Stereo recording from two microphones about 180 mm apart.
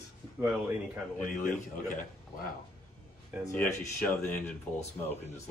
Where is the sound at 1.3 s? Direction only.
45° left (ahead or behind).